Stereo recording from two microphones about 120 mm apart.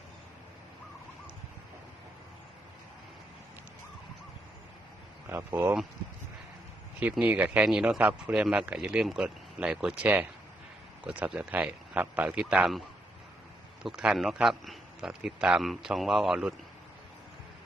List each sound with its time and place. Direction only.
5.3 s speech: 20° right (ahead or behind)
7.0 s a man's voice: 15° right (ahead or behind)
13.8 s a man's voice: 5° right (ahead or behind)